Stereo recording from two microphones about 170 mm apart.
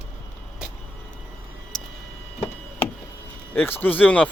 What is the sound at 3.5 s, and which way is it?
Speech, 10° left (ahead or behind).